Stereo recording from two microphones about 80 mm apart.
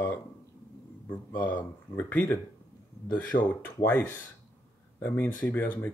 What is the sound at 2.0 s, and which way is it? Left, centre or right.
Speech, centre.